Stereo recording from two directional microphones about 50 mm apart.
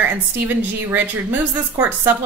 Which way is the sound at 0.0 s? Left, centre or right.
Right.